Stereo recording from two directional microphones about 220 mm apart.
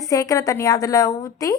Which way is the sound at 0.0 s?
15° left (ahead or behind).